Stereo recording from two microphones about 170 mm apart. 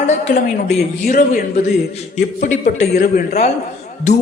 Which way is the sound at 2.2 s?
50° left (ahead or behind).